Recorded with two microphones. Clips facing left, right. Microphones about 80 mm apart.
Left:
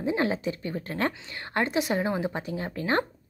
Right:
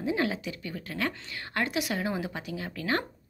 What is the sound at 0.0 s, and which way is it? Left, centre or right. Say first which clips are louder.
A woman's voice: left 3 dB; left.